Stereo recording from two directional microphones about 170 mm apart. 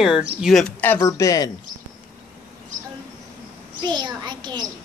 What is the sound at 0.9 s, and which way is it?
Speech, 20° left (ahead or behind).